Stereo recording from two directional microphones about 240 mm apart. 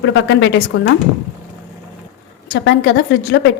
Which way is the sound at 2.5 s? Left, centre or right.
Left.